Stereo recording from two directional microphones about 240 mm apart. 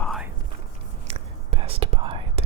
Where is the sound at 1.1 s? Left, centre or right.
Right.